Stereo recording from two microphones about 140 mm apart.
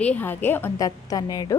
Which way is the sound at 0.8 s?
25° left (ahead or behind).